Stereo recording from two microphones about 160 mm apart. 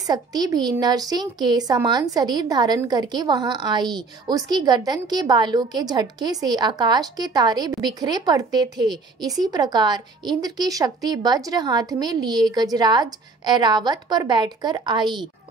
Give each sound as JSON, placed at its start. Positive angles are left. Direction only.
{"t": 0.0, "sound": "a woman's voice", "side_deg": -25}